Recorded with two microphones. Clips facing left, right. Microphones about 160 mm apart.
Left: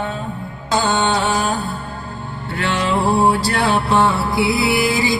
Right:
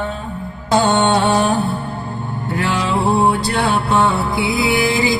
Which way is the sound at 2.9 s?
Centre (ahead or behind).